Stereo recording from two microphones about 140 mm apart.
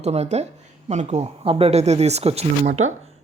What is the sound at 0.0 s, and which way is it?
Speech, 50° right (ahead or behind).